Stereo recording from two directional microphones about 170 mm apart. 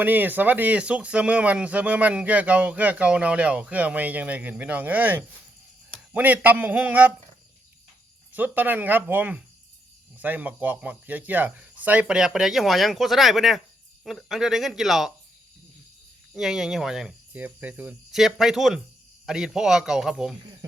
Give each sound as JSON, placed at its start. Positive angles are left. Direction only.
{"t": 0.0, "sound": "speech", "side_deg": -10}
{"t": 8.3, "sound": "speech", "side_deg": -10}
{"t": 16.3, "sound": "speech", "side_deg": 0}